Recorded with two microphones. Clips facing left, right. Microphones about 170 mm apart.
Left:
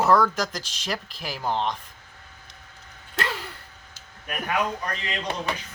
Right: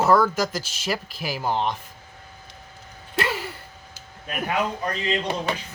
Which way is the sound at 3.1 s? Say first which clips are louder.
Right 4 dB; 5° right (ahead or behind).